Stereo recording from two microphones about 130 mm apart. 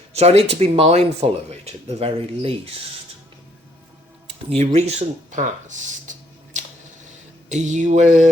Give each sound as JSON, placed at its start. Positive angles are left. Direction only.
{"t": 0.1, "sound": "speech", "side_deg": -55}
{"t": 4.4, "sound": "speech", "side_deg": -55}
{"t": 7.5, "sound": "a sound", "side_deg": -65}